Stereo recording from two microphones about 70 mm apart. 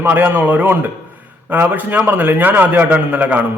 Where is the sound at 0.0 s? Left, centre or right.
Right.